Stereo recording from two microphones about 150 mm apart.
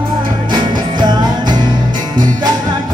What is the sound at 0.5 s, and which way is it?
Music, 30° right (ahead or behind).